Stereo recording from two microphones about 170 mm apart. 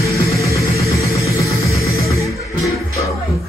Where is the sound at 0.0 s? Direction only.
20° left (ahead or behind).